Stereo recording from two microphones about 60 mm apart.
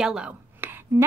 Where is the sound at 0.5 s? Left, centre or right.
Right.